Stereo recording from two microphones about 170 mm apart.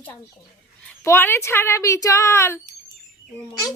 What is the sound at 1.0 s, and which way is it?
Speech, 15° left (ahead or behind).